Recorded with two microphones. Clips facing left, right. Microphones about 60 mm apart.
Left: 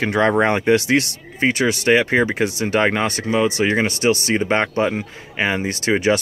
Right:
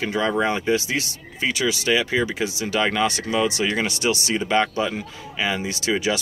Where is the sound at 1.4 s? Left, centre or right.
Left.